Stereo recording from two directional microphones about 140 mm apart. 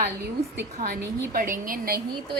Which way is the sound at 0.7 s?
75° right (ahead or behind).